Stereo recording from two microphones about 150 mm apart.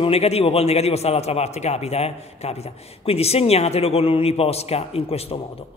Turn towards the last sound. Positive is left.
turn(degrees=40)  # may be behind; listen again after turning